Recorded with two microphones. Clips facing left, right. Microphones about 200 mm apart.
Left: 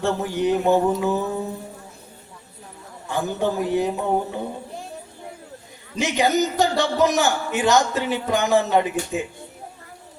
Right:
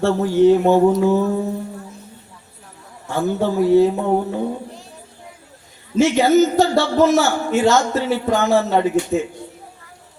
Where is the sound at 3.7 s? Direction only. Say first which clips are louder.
Right 13 dB; 15° left (ahead or behind).